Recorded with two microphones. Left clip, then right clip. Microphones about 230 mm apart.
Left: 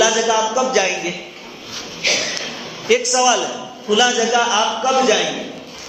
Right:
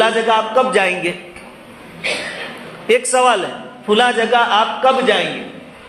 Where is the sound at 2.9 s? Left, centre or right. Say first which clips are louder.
Right 2 dB; right.